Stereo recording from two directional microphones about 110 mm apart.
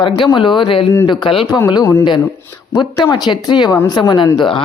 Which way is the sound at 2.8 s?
40° left (ahead or behind).